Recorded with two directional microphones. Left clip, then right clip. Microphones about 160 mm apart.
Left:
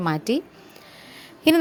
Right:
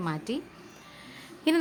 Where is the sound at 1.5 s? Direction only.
40° left (ahead or behind).